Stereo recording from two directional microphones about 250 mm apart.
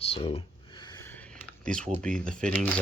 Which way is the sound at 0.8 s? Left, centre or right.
Centre.